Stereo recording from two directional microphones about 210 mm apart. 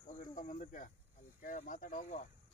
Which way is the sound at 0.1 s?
35° left (ahead or behind).